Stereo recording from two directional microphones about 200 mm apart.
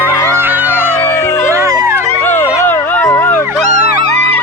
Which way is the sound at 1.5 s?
15° right (ahead or behind).